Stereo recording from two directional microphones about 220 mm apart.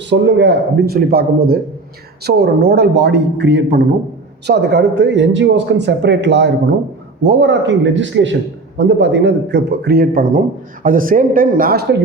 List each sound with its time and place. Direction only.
0.1 s speech: 50° right (ahead or behind)